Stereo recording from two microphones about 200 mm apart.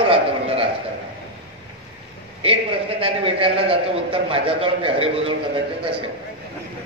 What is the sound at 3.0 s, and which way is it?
A man's voice, 25° right (ahead or behind).